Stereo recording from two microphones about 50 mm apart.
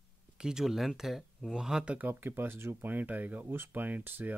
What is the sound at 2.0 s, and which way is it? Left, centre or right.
Speech, right.